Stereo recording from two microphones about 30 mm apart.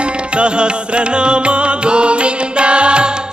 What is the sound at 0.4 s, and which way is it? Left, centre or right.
Music, right.